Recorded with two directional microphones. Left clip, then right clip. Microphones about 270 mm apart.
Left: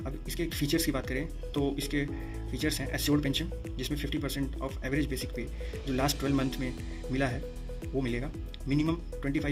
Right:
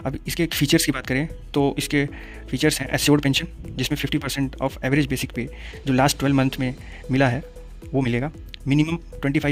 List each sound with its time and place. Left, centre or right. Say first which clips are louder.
0.0 s speech: right 11 dB; right